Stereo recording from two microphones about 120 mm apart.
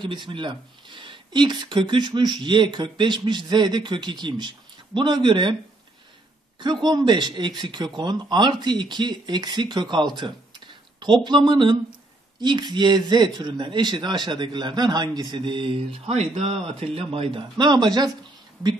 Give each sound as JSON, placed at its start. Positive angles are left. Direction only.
{"t": 0.0, "sound": "speech", "side_deg": -40}
{"t": 6.6, "sound": "speech", "side_deg": -35}
{"t": 17.6, "sound": "speech", "side_deg": -35}